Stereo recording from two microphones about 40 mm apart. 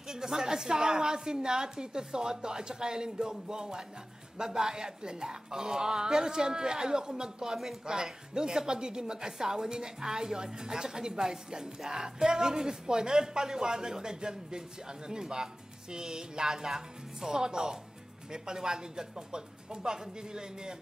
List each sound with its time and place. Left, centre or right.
0.1 s speech: centre